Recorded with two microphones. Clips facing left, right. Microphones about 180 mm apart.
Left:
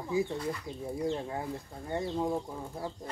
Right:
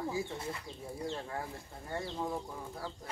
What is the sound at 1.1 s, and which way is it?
Speech, 20° left (ahead or behind).